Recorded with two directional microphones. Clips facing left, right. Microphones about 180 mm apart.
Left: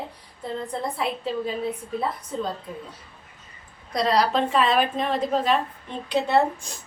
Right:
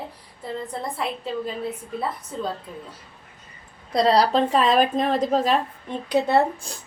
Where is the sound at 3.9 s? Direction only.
30° right (ahead or behind).